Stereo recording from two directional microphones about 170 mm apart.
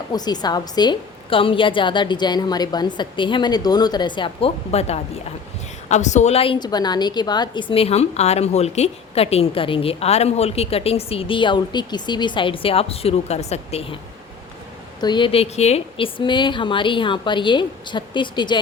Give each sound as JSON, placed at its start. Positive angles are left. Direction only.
{"t": 0.1, "sound": "a woman's voice", "side_deg": 25}
{"t": 15.0, "sound": "a woman's voice", "side_deg": 25}